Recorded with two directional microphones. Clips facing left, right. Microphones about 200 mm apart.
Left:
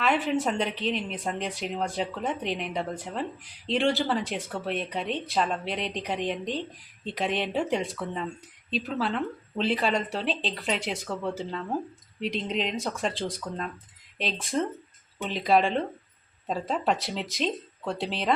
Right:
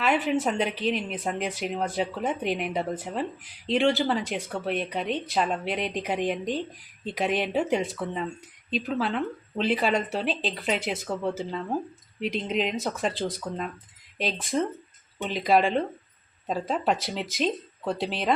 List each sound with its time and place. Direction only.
0.0 s speech: centre (ahead or behind)